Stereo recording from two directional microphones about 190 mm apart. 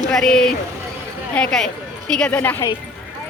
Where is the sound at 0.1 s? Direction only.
5° left (ahead or behind).